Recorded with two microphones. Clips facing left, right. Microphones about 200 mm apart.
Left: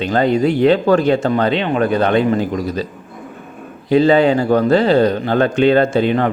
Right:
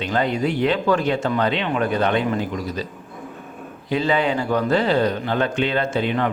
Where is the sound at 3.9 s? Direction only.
35° left (ahead or behind).